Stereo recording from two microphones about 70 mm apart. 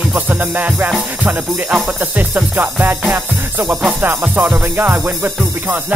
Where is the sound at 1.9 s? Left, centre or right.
Right.